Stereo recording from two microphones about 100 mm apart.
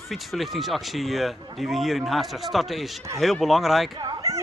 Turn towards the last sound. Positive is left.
turn(degrees=-35)  # may be behind; listen again after turning